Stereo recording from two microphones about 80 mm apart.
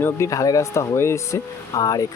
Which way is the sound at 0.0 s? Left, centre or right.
Left.